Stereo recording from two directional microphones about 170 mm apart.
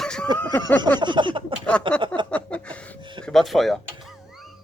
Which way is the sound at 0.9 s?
25° right (ahead or behind).